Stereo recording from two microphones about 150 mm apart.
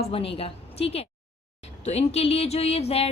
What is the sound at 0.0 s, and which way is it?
A woman's voice, 40° left (ahead or behind).